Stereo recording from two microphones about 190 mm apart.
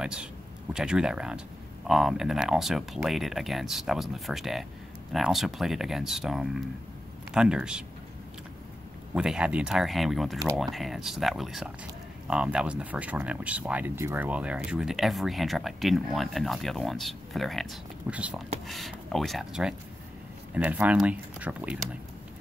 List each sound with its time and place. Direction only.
0.0 s speech: 5° right (ahead or behind)
9.1 s speech: 5° right (ahead or behind)